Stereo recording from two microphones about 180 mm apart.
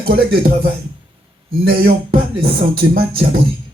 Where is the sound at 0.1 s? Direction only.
60° right (ahead or behind).